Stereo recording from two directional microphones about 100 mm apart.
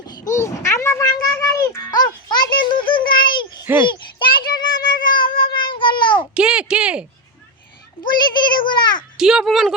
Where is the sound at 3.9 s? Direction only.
55° left (ahead or behind).